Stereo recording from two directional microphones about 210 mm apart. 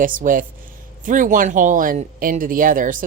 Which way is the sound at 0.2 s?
40° right (ahead or behind).